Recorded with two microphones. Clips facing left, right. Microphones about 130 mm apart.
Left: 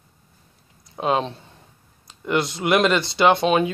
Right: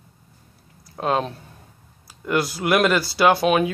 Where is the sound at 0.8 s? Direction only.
Centre (ahead or behind).